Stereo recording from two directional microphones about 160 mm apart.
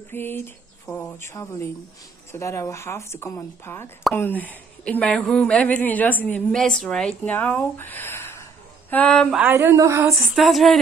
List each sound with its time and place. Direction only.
0.1 s a woman's voice: 15° left (ahead or behind)
9.4 s speech: 15° right (ahead or behind)
10.1 s speech: centre (ahead or behind)